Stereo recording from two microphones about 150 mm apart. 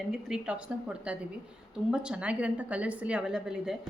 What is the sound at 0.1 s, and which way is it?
Speech, 5° right (ahead or behind).